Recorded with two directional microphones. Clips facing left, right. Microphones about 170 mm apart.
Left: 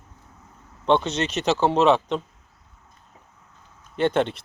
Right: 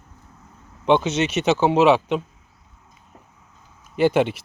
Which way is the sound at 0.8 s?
5° right (ahead or behind).